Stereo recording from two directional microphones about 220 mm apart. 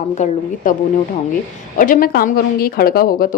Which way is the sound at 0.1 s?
30° left (ahead or behind).